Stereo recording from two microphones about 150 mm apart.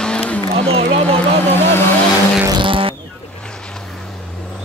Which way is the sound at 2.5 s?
35° right (ahead or behind).